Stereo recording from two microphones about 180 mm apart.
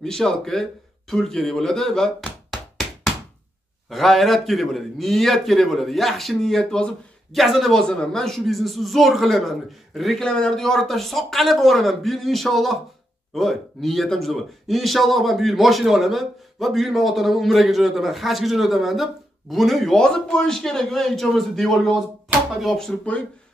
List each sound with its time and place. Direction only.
0.0 s a man's voice: 5° left (ahead or behind)
3.9 s a man's voice: centre (ahead or behind)